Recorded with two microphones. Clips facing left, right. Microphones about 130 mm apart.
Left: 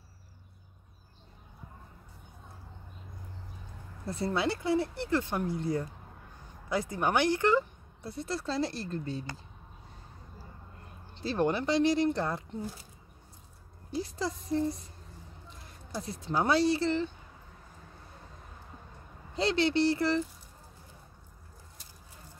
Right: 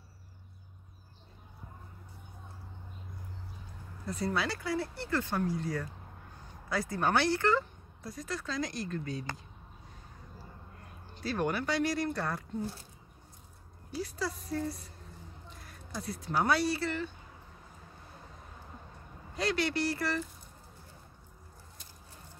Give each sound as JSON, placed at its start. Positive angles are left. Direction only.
{"t": 4.1, "sound": "speech", "side_deg": 25}
{"t": 8.1, "sound": "speech", "side_deg": 30}
{"t": 11.1, "sound": "speech", "side_deg": 25}
{"t": 13.9, "sound": "speech", "side_deg": 25}
{"t": 15.9, "sound": "speech", "side_deg": 25}
{"t": 19.3, "sound": "speech", "side_deg": 25}